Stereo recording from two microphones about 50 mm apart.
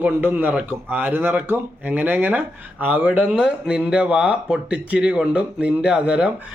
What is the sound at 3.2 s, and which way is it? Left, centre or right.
A man's voice, centre.